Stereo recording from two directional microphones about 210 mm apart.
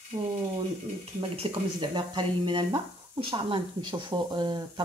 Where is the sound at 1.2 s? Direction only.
25° right (ahead or behind).